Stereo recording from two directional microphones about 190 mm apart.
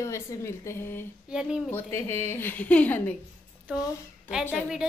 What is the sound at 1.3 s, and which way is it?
Speech, 5° right (ahead or behind).